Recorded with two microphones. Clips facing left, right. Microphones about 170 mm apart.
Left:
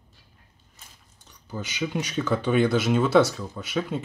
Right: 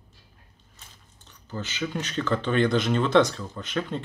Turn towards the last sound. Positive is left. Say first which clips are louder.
# left 2 dB
turn(degrees=5)  # may be behind; listen again after turning